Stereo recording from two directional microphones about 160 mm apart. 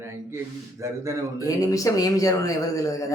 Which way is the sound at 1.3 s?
20° left (ahead or behind).